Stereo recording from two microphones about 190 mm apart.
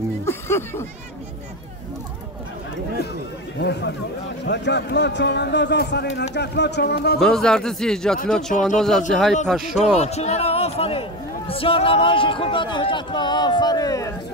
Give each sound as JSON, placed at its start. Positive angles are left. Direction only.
{"t": 0.2, "sound": "a sound", "side_deg": 15}
{"t": 3.5, "sound": "speech", "side_deg": 65}
{"t": 7.2, "sound": "speech", "side_deg": 5}
{"t": 9.9, "sound": "a man's voice", "side_deg": 35}